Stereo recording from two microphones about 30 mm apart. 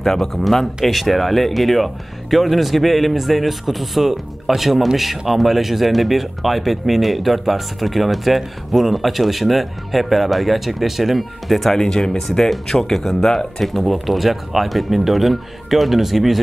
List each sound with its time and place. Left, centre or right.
0.0 s speech: centre
11.8 s speech: left
13.7 s speech: centre